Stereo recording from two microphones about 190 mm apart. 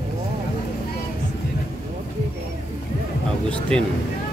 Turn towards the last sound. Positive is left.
turn(degrees=5)  # may be behind; listen again after turning